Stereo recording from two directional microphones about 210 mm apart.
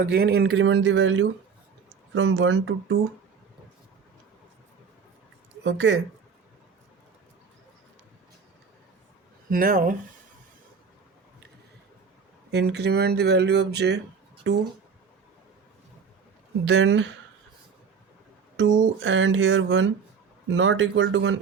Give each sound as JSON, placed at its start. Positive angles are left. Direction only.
{"t": 0.0, "sound": "speech", "side_deg": -45}
{"t": 5.6, "sound": "speech", "side_deg": -65}
{"t": 9.5, "sound": "speech", "side_deg": -40}
{"t": 12.5, "sound": "speech", "side_deg": -50}
{"t": 16.6, "sound": "speech", "side_deg": -60}
{"t": 18.5, "sound": "speech", "side_deg": -65}